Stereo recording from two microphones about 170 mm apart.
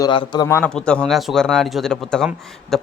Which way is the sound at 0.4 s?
15° left (ahead or behind).